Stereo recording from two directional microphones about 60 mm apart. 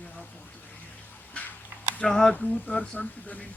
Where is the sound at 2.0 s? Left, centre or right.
Centre.